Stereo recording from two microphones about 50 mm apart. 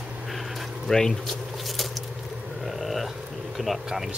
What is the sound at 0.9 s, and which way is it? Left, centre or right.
Speech, centre.